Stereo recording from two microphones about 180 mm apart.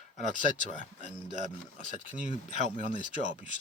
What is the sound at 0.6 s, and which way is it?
Speech, 45° left (ahead or behind).